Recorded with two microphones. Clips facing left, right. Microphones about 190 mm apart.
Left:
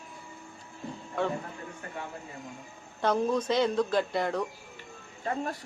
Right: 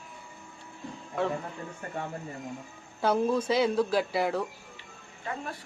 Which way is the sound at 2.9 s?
5° right (ahead or behind).